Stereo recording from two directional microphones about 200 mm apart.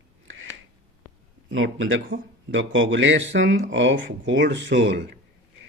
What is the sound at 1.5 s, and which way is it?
A man's voice, 80° right.